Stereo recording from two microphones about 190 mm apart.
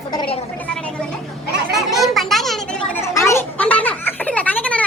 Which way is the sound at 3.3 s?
10° left (ahead or behind).